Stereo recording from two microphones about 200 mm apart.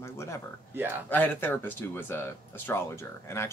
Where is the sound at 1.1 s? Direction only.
10° left (ahead or behind).